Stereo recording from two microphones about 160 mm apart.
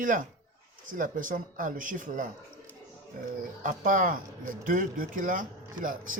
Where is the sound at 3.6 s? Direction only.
55° right (ahead or behind).